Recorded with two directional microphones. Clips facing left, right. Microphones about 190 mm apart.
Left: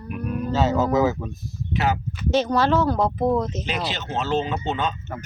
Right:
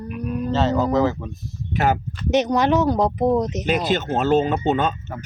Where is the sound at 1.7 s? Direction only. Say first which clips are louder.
Right 3 dB; 50° right (ahead or behind).